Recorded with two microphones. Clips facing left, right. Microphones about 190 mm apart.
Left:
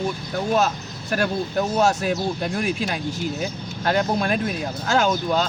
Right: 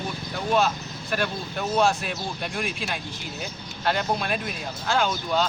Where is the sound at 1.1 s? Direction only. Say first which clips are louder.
Left 6 dB; 45° left (ahead or behind).